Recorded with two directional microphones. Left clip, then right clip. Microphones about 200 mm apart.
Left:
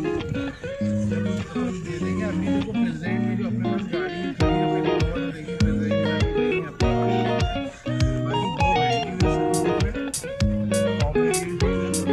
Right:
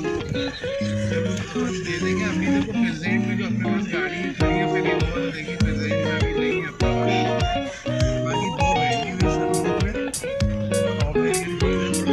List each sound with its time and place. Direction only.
4.4 s music: centre (ahead or behind)